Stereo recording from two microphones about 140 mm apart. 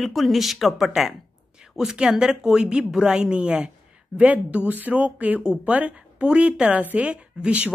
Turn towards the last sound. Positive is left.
turn(degrees=-10)  # may be behind; listen again after turning